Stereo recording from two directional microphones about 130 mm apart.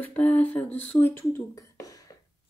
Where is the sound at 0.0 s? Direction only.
10° left (ahead or behind).